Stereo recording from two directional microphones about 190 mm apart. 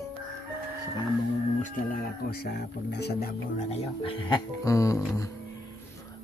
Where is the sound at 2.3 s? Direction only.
55° left (ahead or behind).